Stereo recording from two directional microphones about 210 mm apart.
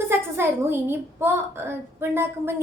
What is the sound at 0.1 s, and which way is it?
A woman's voice, 10° right (ahead or behind).